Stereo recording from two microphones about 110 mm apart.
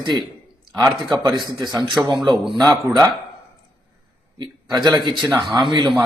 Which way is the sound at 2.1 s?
45° right (ahead or behind).